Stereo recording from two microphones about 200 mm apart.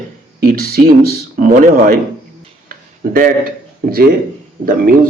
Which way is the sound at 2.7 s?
45° right (ahead or behind).